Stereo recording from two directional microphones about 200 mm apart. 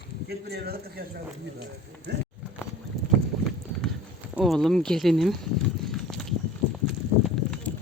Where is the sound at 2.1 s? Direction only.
55° right (ahead or behind).